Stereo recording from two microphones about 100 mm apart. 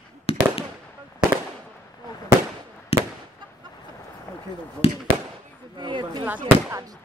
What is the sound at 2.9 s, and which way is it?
Fireworks, 80° left.